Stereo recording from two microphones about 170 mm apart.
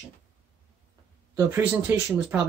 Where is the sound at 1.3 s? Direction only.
10° right (ahead or behind).